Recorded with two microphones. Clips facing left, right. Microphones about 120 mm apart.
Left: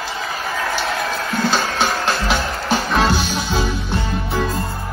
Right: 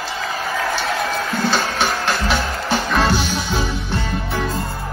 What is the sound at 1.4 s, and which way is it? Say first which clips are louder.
Music: left 2 dB; 15° left (ahead or behind).